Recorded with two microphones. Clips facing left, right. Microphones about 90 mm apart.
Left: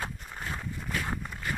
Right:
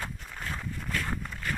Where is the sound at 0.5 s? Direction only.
10° left (ahead or behind).